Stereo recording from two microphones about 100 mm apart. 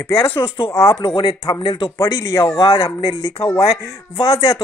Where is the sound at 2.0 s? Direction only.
35° left (ahead or behind).